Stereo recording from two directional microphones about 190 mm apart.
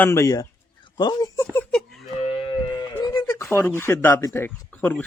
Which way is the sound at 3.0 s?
25° left (ahead or behind).